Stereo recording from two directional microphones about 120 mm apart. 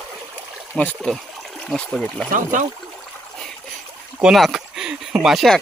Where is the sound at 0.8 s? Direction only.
5° left (ahead or behind).